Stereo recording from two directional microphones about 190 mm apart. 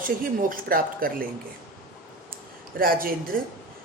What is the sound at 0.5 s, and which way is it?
Speech, 50° right (ahead or behind).